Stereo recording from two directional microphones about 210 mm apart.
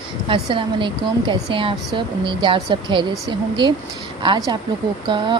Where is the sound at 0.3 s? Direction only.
25° right (ahead or behind).